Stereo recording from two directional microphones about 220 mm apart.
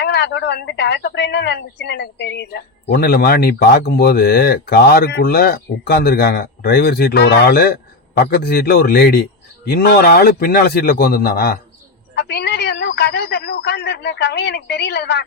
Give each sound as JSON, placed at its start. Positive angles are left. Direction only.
{"t": 0.0, "sound": "speech", "side_deg": 50}